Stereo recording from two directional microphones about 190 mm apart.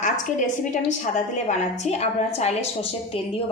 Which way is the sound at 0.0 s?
40° left (ahead or behind).